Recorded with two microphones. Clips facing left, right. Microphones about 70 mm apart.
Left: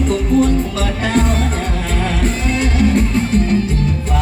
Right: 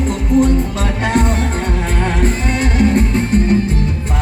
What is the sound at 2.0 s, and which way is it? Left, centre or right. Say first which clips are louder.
Music: right 1 dB; right.